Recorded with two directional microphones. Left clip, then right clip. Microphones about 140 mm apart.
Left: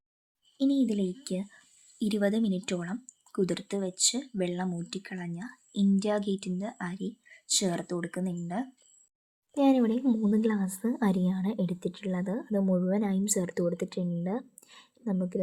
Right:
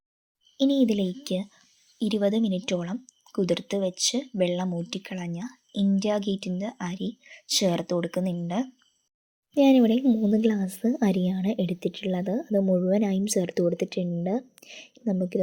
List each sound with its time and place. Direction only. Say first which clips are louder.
0.5 s speech: right 5 dB; 25° right (ahead or behind)
2.0 s speech: right 4 dB; 5° right (ahead or behind)